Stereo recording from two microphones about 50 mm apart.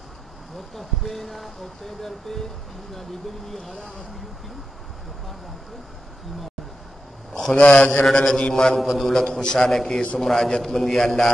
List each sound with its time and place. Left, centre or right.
0.7 s a man's voice: centre
7.5 s a man's voice: left
8.0 s a man's voice: centre
8.7 s a man's voice: centre
9.1 s a man's voice: centre